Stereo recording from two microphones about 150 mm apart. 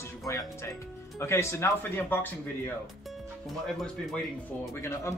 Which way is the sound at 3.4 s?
Centre (ahead or behind).